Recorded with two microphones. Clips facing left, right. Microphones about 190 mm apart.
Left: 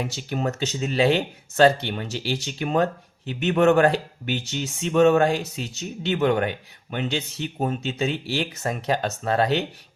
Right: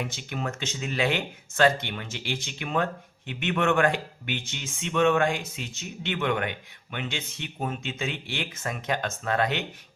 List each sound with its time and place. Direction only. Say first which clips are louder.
0.2 s speech: left 6 dB; 35° left (ahead or behind)